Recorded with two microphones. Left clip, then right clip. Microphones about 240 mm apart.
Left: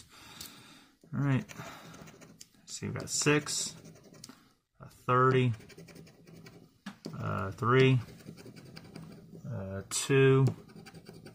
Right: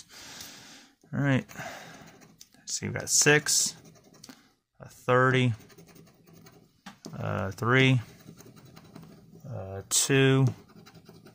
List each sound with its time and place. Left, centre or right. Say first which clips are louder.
1.1 s speech: right 6 dB; right
2.8 s speech: right 7 dB; right
5.0 s speech: right 3 dB; right
7.2 s speech: right 3 dB; right
9.8 s speech: right 2 dB; right